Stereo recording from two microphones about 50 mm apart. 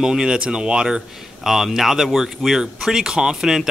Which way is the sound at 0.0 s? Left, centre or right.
Centre.